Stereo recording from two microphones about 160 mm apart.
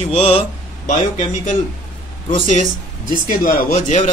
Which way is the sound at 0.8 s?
50° left (ahead or behind).